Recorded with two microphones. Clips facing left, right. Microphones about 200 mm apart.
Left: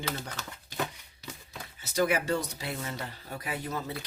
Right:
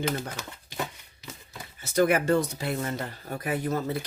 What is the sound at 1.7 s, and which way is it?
Speech, 55° right (ahead or behind).